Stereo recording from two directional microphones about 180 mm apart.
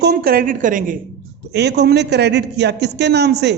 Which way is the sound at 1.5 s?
70° right (ahead or behind).